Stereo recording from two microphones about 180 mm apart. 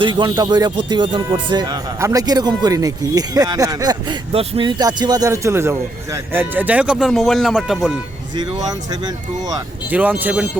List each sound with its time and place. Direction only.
0.0 s speech: 25° right (ahead or behind); by 7.9 s centre (ahead or behind)
8.4 s speech: 25° right (ahead or behind)
9.9 s speech: 10° right (ahead or behind)